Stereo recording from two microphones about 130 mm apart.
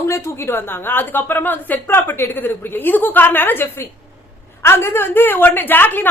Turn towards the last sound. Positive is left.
turn(degrees=15)  # may be behind; listen again after turning